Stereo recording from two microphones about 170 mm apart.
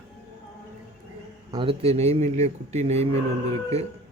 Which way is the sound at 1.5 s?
30° right (ahead or behind).